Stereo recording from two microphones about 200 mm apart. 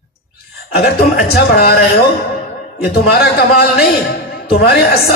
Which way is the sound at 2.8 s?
50° left (ahead or behind).